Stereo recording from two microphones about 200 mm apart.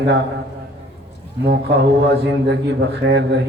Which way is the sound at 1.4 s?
55° right (ahead or behind).